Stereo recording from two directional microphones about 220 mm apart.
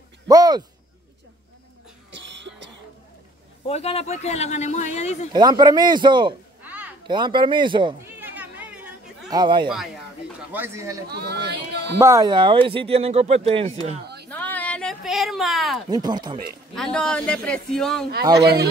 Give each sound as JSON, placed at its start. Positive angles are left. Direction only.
{"t": 0.3, "sound": "speech", "side_deg": -20}
{"t": 2.0, "sound": "a sound", "side_deg": -55}
{"t": 3.6, "sound": "speech", "side_deg": 25}
{"t": 5.3, "sound": "speech", "side_deg": -20}
{"t": 6.6, "sound": "a sound", "side_deg": -5}
{"t": 7.1, "sound": "speech", "side_deg": -20}
{"t": 8.2, "sound": "cat", "side_deg": -5}
{"t": 9.3, "sound": "speech", "side_deg": -20}
{"t": 11.1, "sound": "speech", "side_deg": -45}
{"t": 12.0, "sound": "speech", "side_deg": -15}
{"t": 14.3, "sound": "a sound", "side_deg": 5}
{"t": 15.9, "sound": "speech", "side_deg": -20}
{"t": 16.7, "sound": "a man's voice", "side_deg": 0}
{"t": 18.4, "sound": "speech", "side_deg": -45}